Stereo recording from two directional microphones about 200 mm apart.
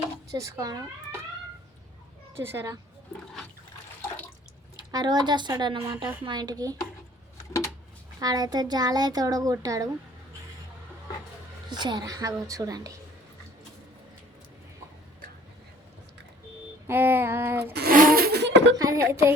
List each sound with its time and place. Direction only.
0.3 s speech: 15° right (ahead or behind)
2.4 s a woman's voice: 10° right (ahead or behind)
4.9 s speech: 20° right (ahead or behind)
8.2 s speech: 20° right (ahead or behind)
11.7 s a woman's voice: 20° right (ahead or behind)
16.8 s a woman's voice: 10° right (ahead or behind)
17.7 s a sound: 45° right (ahead or behind)
18.8 s a woman's voice: 15° right (ahead or behind)